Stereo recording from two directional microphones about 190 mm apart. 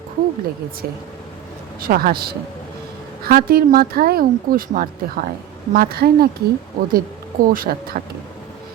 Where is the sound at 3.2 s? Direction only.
50° right (ahead or behind).